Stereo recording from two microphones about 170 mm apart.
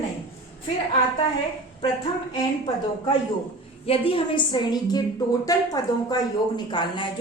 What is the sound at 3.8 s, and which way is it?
A woman's voice, 35° left (ahead or behind).